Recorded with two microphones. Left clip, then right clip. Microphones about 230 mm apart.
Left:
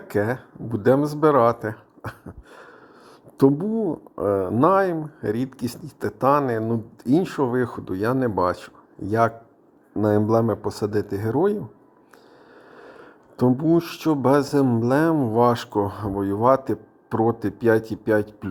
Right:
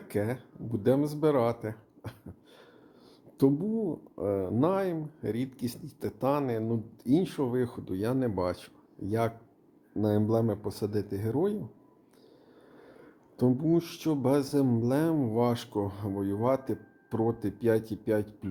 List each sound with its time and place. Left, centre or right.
0.1 s speech: left
12.7 s speech: left